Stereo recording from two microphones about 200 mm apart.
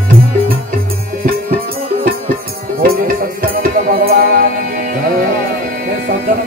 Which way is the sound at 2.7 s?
45° right (ahead or behind).